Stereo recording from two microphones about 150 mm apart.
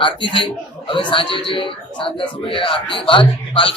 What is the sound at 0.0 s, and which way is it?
A man's voice, 35° left (ahead or behind).